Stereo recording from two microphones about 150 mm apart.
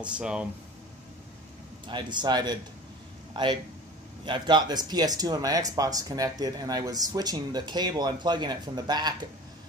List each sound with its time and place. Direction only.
0.0 s speech: 5° right (ahead or behind)
1.9 s speech: 30° right (ahead or behind)
4.3 s speech: 30° right (ahead or behind)